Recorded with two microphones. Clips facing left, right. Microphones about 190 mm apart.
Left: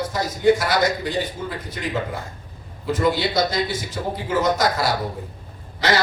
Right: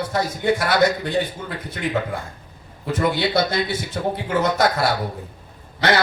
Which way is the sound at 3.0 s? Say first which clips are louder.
Right 1 dB; 60° right (ahead or behind).